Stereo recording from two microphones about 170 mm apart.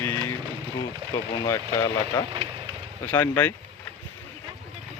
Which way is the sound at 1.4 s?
15° left (ahead or behind).